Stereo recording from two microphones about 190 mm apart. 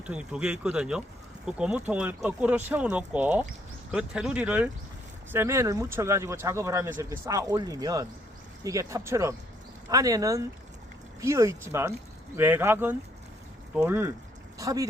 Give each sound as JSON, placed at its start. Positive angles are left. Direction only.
{"t": 0.0, "sound": "speech", "side_deg": -5}